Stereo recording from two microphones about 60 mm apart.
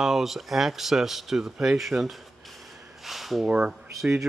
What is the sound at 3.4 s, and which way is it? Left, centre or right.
Speech, centre.